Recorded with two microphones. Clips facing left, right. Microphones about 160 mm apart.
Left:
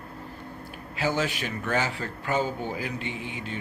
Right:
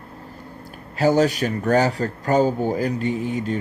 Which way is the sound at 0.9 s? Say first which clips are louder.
Right 10 dB; 40° right (ahead or behind).